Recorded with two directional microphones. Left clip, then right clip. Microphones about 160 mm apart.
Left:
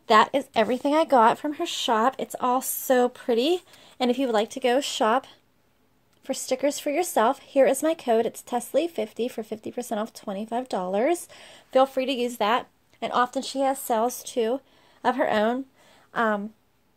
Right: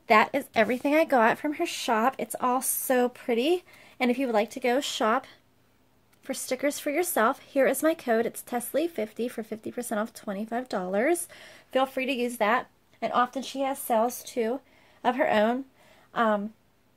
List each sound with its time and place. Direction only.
0.0 s speech: 20° left (ahead or behind)
13.0 s speech: 55° left (ahead or behind)
14.0 s speech: 35° left (ahead or behind)